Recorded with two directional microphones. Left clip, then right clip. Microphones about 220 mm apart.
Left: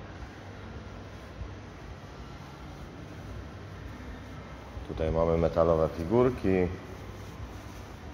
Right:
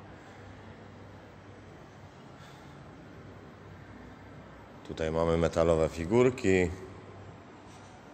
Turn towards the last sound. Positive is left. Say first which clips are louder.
# even
turn(degrees=-40)  # may be behind; listen again after turning